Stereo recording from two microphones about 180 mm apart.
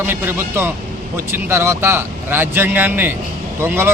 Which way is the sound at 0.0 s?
10° right (ahead or behind).